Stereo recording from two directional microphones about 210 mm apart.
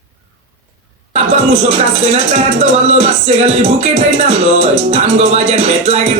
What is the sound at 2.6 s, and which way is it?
Music, 30° right (ahead or behind).